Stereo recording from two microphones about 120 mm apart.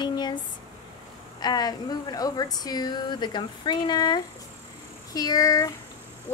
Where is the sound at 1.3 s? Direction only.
35° left (ahead or behind).